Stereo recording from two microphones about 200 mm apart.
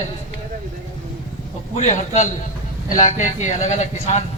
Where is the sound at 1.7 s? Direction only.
35° left (ahead or behind).